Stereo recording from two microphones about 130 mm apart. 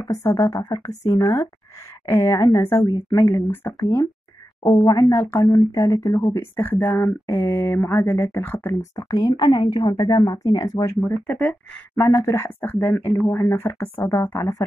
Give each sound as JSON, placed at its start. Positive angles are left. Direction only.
{"t": 0.0, "sound": "speech", "side_deg": 25}
{"t": 3.3, "sound": "speech", "side_deg": 35}
{"t": 3.8, "sound": "speech", "side_deg": 20}
{"t": 9.1, "sound": "speech", "side_deg": 30}
{"t": 11.9, "sound": "speech", "side_deg": 20}